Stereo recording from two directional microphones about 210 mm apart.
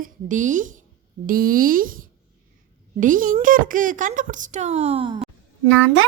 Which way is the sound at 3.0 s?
40° right (ahead or behind).